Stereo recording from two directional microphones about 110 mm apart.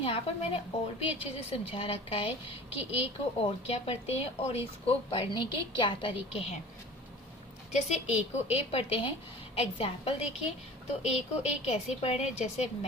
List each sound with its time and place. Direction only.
0.0 s speech: 55° left (ahead or behind)
5.3 s a woman's voice: 45° left (ahead or behind)
7.7 s a woman's voice: 90° left
8.1 s a woman's voice: 75° left (ahead or behind); by 10.2 s 55° left (ahead or behind)
10.3 s a woman's voice: 85° left